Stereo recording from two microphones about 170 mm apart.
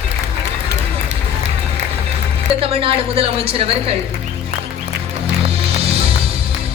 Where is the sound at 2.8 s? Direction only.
35° right (ahead or behind).